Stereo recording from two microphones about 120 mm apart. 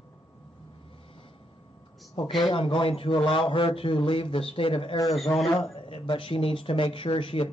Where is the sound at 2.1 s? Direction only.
40° left (ahead or behind).